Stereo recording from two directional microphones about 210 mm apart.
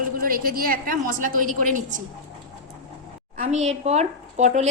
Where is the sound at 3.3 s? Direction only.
35° right (ahead or behind).